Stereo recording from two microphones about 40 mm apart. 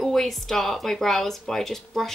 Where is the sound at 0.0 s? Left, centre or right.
Centre.